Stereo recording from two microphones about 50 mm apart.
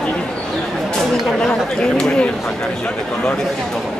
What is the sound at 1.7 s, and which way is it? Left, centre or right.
Speech, centre.